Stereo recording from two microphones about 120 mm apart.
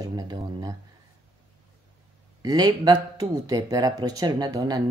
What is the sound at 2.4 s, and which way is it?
Speech, 35° right (ahead or behind).